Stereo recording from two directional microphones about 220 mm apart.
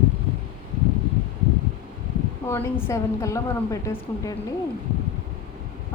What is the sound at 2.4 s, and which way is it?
Speech, 10° left (ahead or behind).